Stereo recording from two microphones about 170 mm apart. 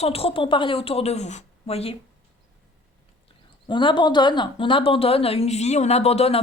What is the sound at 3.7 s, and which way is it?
Speech, 30° left (ahead or behind).